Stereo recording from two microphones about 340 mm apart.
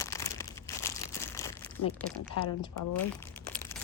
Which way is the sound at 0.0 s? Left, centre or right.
Centre.